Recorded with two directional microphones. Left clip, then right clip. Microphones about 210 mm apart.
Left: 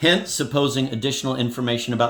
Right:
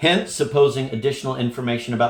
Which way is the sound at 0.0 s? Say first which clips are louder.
Right 1 dB; 50° left (ahead or behind).